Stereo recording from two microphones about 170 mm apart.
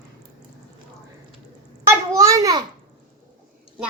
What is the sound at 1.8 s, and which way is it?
Speech, 20° right (ahead or behind).